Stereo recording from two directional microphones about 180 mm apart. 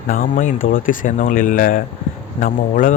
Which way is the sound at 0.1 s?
50° left (ahead or behind).